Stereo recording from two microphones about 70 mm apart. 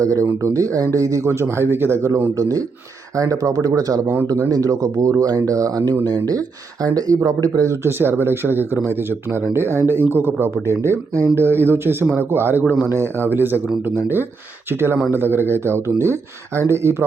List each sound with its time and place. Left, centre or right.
0.0 s speech: right
1.3 s speech: right
2.0 s speech: right
4.0 s speech: right
4.3 s speech: right
6.8 s speech: right
7.9 s speech: right
10.5 s speech: right